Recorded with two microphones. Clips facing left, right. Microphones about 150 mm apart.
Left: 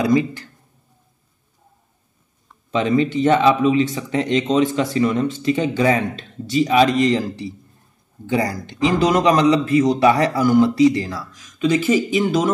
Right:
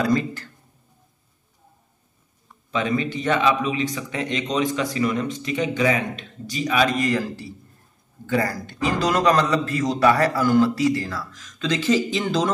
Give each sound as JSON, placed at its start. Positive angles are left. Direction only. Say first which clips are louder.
{"t": 2.7, "sound": "a man's voice", "louder": "left 6 dB", "side_deg": 30}